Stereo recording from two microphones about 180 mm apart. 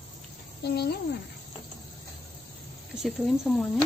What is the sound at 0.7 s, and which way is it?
Speech, 65° left (ahead or behind).